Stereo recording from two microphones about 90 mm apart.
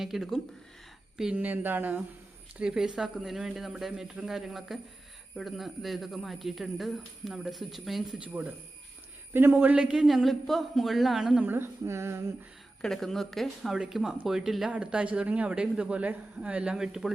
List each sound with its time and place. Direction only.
0.0 s a man's voice: 5° right (ahead or behind)
1.2 s speech: 15° right (ahead or behind)
2.6 s a man's voice: 10° right (ahead or behind)
8.2 s speech: 15° right (ahead or behind)
9.5 s a man's voice: 15° right (ahead or behind)
11.4 s speech: 25° right (ahead or behind)
12.8 s a man's voice: 5° left (ahead or behind)